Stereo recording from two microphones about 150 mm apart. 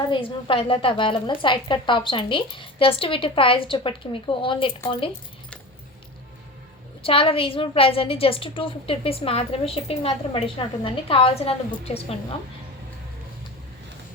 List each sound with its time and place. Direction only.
0.1 s a woman's voice: 35° left (ahead or behind)
7.0 s a woman's voice: 35° left (ahead or behind)